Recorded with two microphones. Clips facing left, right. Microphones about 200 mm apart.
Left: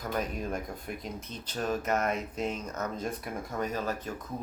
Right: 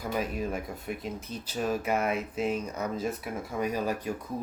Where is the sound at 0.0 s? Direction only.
5° right (ahead or behind).